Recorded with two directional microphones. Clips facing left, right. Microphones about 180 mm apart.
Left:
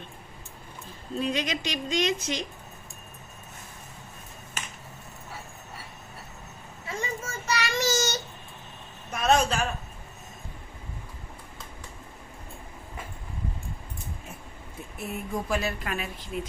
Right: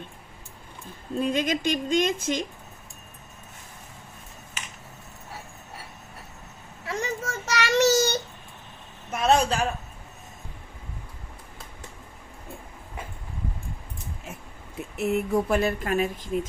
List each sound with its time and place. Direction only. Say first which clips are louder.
1.2 s speech: right 4 dB; 50° right (ahead or behind)
6.8 s child singing: right 4 dB; 75° right (ahead or behind)
9.0 s a sound: right 2 dB; 30° right (ahead or behind)
14.9 s speech: right 9 dB; 75° right (ahead or behind); by 16.5 s 45° right (ahead or behind)